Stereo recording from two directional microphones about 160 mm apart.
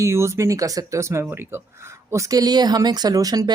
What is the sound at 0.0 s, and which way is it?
A woman's voice, 15° right (ahead or behind).